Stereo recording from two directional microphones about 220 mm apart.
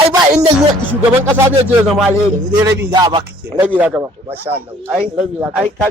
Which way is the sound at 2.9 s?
20° right (ahead or behind).